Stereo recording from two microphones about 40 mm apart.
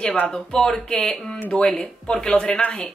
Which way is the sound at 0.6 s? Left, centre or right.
Centre.